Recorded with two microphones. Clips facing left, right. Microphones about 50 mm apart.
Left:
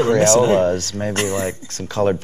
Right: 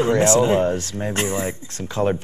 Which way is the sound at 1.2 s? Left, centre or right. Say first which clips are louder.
Left 2 dB; left.